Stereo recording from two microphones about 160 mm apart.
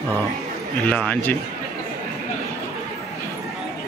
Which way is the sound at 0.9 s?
10° left (ahead or behind).